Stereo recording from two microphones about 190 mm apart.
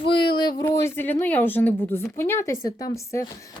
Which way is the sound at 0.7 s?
10° left (ahead or behind).